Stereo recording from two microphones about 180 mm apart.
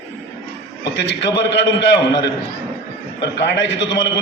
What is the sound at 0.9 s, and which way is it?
A man's voice, 75° left (ahead or behind).